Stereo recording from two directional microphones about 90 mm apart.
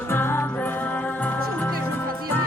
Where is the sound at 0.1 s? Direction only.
25° left (ahead or behind).